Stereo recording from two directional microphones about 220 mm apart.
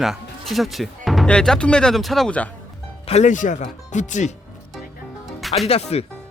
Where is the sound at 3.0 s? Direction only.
30° left (ahead or behind).